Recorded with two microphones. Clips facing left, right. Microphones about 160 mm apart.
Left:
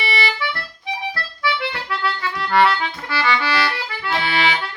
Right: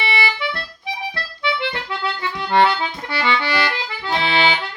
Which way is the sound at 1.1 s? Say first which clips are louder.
Even; 25° right (ahead or behind).